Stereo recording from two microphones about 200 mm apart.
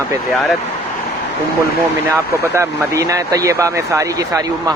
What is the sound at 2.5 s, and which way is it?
Speech, 15° right (ahead or behind).